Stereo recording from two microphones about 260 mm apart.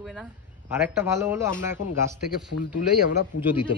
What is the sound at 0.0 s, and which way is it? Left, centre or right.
Speech, centre.